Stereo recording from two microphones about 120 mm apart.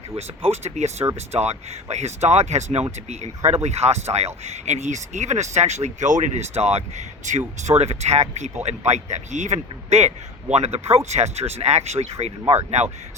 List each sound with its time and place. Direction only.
0.2 s speech: 60° right (ahead or behind)
10.5 s speech: 65° right (ahead or behind)